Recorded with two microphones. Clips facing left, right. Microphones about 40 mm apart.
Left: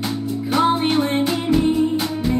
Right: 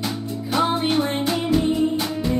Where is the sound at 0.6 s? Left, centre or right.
Left.